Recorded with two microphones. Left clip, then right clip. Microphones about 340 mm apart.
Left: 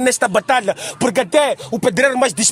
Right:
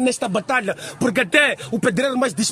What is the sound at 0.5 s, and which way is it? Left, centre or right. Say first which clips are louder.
A man's voice: left 5 dB; left.